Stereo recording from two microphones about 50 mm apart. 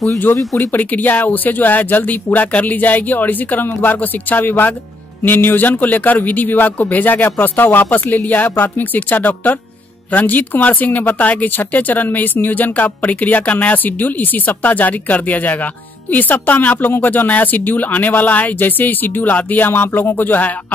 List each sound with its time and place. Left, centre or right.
0.6 s speech: left